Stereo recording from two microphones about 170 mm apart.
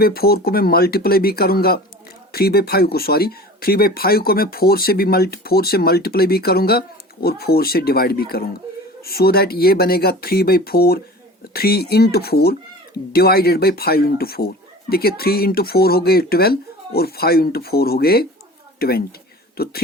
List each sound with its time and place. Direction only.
0.0 s a woman's voice: 65° left (ahead or behind)